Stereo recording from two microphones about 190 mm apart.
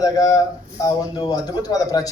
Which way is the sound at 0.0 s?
20° left (ahead or behind).